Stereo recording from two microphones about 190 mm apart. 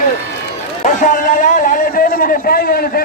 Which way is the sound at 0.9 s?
40° left (ahead or behind).